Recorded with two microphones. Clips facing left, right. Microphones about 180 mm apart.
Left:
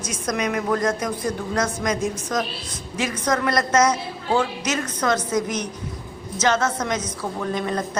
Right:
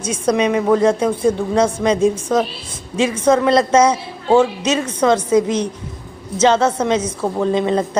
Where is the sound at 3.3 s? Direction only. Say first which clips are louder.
Right 7 dB; 25° right (ahead or behind).